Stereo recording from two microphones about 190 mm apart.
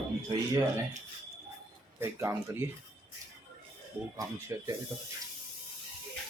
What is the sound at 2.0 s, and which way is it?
Speech, 15° right (ahead or behind).